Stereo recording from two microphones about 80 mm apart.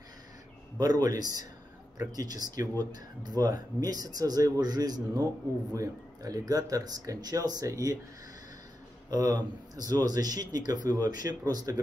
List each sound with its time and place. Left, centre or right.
0.7 s speech: right
9.1 s speech: right